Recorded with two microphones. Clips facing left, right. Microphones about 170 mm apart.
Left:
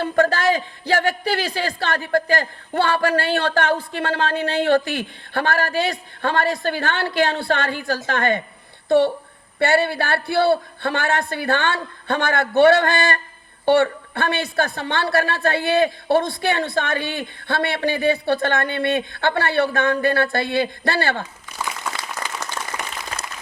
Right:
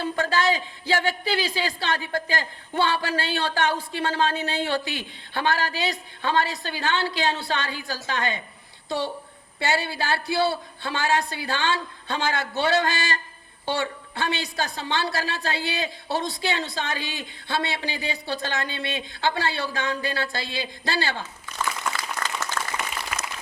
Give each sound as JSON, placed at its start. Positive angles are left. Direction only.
{"t": 0.0, "sound": "a man's voice", "side_deg": 55}
{"t": 9.6, "sound": "a woman's voice", "side_deg": 55}
{"t": 21.6, "sound": "applause", "side_deg": 10}